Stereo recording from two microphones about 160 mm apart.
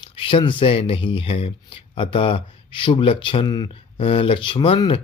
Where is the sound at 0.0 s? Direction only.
35° left (ahead or behind).